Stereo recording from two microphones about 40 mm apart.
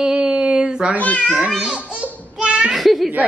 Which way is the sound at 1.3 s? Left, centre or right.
Right.